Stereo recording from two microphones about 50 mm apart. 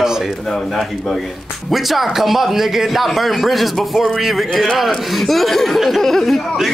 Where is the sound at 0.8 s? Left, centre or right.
Centre.